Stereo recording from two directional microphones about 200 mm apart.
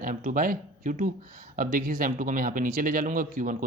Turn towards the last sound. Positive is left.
turn(degrees=-40)  # may be behind; listen again after turning